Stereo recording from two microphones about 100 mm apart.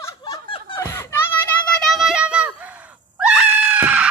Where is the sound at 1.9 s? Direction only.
5° right (ahead or behind).